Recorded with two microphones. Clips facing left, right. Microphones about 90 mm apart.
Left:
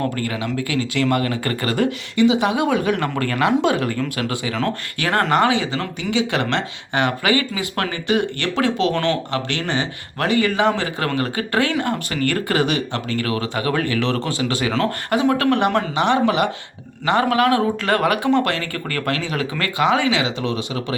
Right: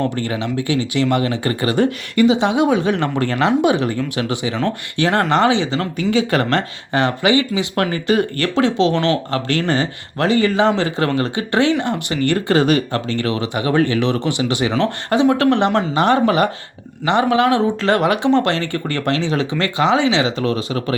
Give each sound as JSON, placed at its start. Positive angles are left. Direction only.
{"t": 0.2, "sound": "speech", "side_deg": -25}
{"t": 6.0, "sound": "speech", "side_deg": -45}
{"t": 7.2, "sound": "speech", "side_deg": -20}
{"t": 8.0, "sound": "speech", "side_deg": -40}
{"t": 12.6, "sound": "speech", "side_deg": -40}
{"t": 14.0, "sound": "speech", "side_deg": -20}
{"t": 16.0, "sound": "speech", "side_deg": -40}
{"t": 17.1, "sound": "speech", "side_deg": -20}